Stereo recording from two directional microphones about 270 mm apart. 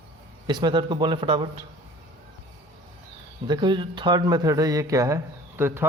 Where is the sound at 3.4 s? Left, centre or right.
Centre.